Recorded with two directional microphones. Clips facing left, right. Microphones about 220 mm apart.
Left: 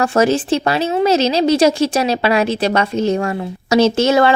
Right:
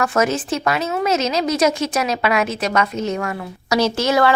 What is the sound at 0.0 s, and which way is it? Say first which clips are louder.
Speech: left 5 dB; 30° left (ahead or behind).